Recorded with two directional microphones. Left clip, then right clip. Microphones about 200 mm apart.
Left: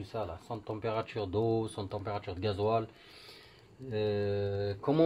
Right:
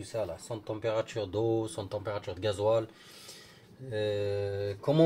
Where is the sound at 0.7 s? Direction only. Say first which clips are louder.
Right 4 dB; 30° left (ahead or behind).